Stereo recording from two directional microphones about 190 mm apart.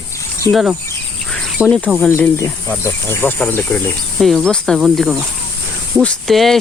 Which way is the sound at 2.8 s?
10° left (ahead or behind).